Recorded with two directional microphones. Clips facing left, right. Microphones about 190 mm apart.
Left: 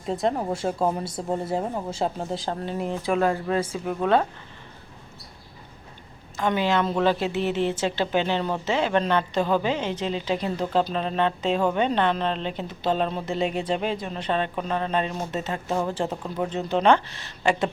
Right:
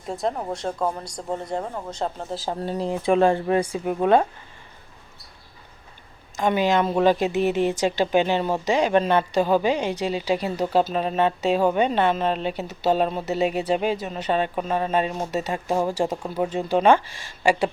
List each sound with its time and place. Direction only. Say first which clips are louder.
0.0 s speech: left 2 dB; centre (ahead or behind)
2.6 s speech: right 5 dB; 30° right (ahead or behind); by 4.3 s 15° right (ahead or behind)
6.3 s a woman's voice: right 3 dB; 15° right (ahead or behind)